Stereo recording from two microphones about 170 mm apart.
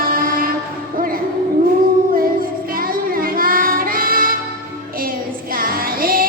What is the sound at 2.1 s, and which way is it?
Child singing, 55° right (ahead or behind).